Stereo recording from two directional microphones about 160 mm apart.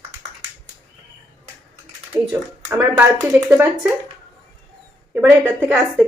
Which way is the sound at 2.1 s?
15° right (ahead or behind).